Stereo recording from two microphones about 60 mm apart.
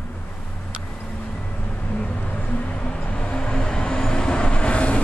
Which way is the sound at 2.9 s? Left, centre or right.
Centre.